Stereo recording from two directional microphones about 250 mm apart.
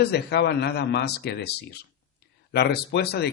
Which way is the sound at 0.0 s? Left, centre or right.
Left.